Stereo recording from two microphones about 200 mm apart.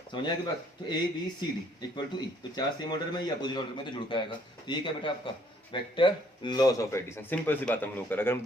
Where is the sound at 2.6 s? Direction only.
20° left (ahead or behind).